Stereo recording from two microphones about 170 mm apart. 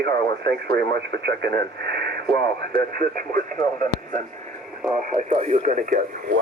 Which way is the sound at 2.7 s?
55° right (ahead or behind).